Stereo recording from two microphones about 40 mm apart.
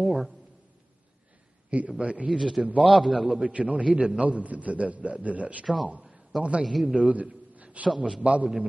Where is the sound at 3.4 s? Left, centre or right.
Right.